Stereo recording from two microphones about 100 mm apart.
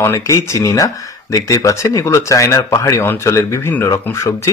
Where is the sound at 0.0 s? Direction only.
30° left (ahead or behind).